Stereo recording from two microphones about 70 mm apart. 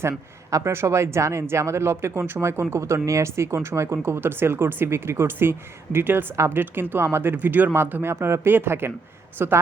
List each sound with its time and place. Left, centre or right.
0.5 s speech: right